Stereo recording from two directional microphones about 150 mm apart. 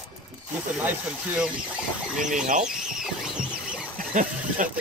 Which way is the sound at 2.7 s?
5° right (ahead or behind).